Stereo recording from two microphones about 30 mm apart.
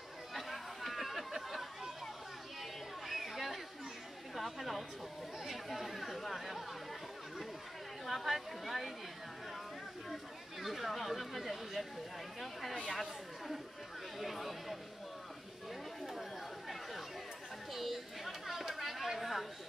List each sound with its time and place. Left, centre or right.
0.3 s chatter: centre
3.1 s a sound: centre
4.4 s chatter: centre
5.4 s speech: centre
10.6 s speech: centre
14.1 s speech: centre
16.1 s chatter: centre
17.7 s a sound: centre
18.8 s chatter: centre